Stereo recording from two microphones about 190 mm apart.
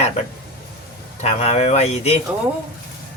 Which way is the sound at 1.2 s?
35° left (ahead or behind).